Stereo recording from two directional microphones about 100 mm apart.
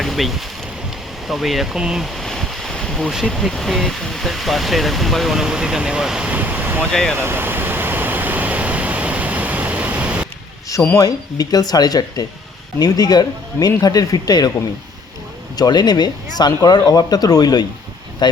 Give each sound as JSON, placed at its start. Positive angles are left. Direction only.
{"t": 0.0, "sound": "speech", "side_deg": 0}
{"t": 6.9, "sound": "speech", "side_deg": 5}
{"t": 7.2, "sound": "a sound", "side_deg": -20}
{"t": 10.9, "sound": "speech", "side_deg": 40}
{"t": 15.5, "sound": "speech", "side_deg": 45}